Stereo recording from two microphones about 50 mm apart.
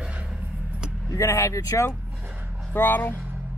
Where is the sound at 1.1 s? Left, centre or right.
Left.